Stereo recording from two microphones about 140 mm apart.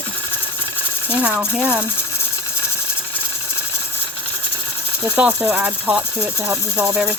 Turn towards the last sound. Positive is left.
turn(degrees=-5)  # may be behind; listen again after turning